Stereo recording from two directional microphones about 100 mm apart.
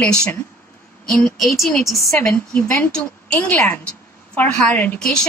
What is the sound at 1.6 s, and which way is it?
Speech, centre (ahead or behind).